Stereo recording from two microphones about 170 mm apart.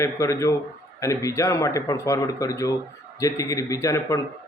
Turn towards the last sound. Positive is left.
turn(degrees=20)  # may be behind; listen again after turning